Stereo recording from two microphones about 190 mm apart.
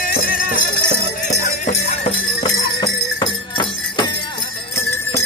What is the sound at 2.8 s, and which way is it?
Music, 20° left (ahead or behind).